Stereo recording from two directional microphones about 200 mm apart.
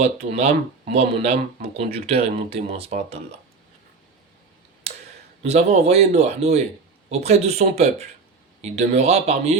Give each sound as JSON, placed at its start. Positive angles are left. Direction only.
{"t": 0.0, "sound": "speech", "side_deg": -35}
{"t": 4.9, "sound": "a sound", "side_deg": -35}
{"t": 5.4, "sound": "speech", "side_deg": -30}